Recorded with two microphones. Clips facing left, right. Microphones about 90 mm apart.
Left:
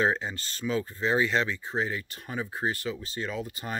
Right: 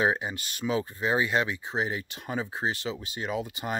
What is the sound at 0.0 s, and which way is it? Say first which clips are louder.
Speech: even; 15° right (ahead or behind).